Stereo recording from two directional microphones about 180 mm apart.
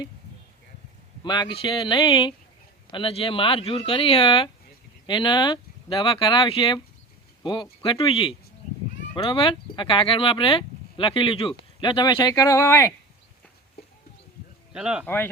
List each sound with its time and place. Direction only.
1.2 s speech: 25° left (ahead or behind)
14.7 s speech: 5° right (ahead or behind)
15.0 s speech: 10° left (ahead or behind)